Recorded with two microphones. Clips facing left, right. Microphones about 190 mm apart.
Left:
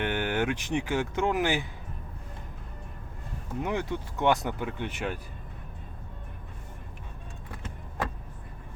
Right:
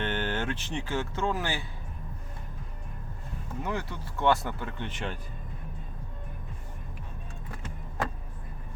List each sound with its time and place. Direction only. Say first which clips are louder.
0.0 s speech: left 3 dB; 15° left (ahead or behind)
3.6 s speech: left 4 dB; 20° left (ahead or behind)